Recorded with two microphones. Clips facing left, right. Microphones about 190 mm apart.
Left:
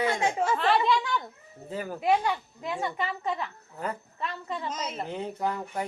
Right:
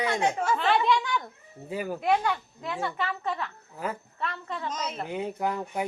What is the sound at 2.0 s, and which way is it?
A child's voice, 10° left (ahead or behind).